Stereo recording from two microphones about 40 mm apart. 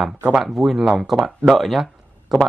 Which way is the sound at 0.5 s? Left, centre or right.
Centre.